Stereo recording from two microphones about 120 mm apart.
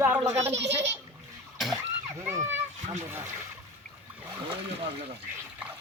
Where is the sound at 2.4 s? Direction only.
80° right.